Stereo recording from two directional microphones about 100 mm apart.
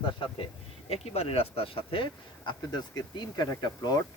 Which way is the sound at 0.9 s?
90° left.